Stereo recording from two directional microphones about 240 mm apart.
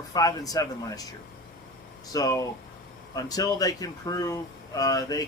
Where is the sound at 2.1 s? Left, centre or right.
Centre.